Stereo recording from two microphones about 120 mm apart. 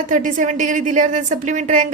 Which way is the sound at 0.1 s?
90° right.